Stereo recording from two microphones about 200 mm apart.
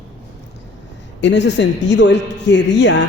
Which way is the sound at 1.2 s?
65° left (ahead or behind).